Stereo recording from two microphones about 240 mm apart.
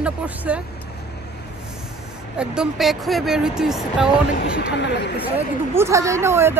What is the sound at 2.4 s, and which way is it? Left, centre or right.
Speech, centre.